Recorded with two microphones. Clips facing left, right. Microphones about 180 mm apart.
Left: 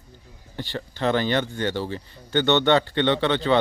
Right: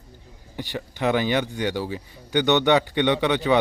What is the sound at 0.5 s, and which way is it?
A man's voice, 15° right (ahead or behind).